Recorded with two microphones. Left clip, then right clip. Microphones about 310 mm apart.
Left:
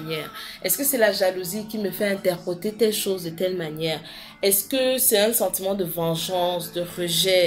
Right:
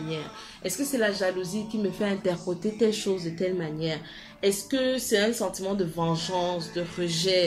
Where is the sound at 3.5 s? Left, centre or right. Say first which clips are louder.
Left 4 dB; left.